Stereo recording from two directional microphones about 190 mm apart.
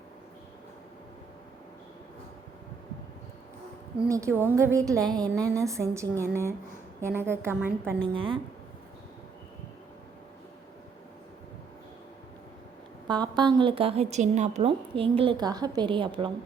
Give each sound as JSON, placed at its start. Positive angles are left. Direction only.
{"t": 4.1, "sound": "a woman's voice", "side_deg": -15}
{"t": 8.1, "sound": "a woman's voice", "side_deg": -25}
{"t": 13.1, "sound": "a woman's voice", "side_deg": -25}